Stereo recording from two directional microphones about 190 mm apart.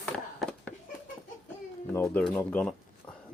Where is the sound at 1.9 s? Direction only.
10° left (ahead or behind).